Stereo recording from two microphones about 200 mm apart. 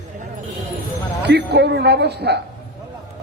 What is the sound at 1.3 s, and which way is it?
A man's voice, 55° right (ahead or behind).